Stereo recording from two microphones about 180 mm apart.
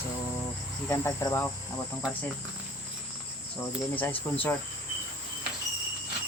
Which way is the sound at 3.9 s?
10° left (ahead or behind).